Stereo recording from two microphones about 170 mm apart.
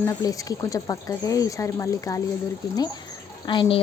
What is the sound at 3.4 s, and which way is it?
Speech, 30° left (ahead or behind).